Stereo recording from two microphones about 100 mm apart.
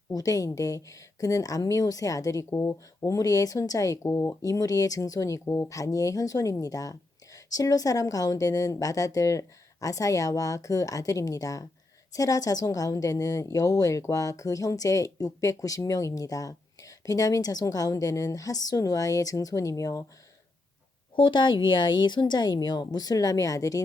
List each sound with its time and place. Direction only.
0.1 s a woman's voice: 35° left (ahead or behind)
21.2 s a woman's voice: 50° left (ahead or behind); by 23.8 s 35° left (ahead or behind)